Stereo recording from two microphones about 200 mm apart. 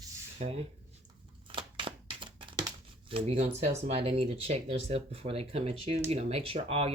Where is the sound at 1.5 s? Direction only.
25° right (ahead or behind).